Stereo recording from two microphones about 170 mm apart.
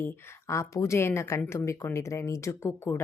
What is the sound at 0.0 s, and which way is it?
A woman's voice, 15° left (ahead or behind).